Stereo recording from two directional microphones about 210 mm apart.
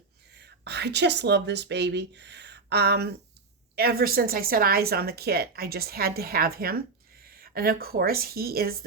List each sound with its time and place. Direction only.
0.3 s a woman's voice: 55° right (ahead or behind)